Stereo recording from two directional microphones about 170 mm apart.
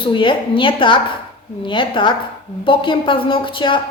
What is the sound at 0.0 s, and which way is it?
A woman's voice, 30° left (ahead or behind).